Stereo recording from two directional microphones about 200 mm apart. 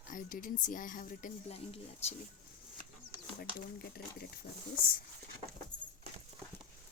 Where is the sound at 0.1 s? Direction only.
45° left (ahead or behind).